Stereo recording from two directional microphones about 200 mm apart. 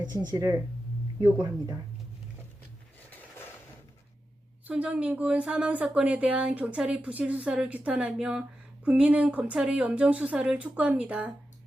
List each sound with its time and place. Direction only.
0.2 s speech: 20° right (ahead or behind)
4.6 s speech: 5° right (ahead or behind)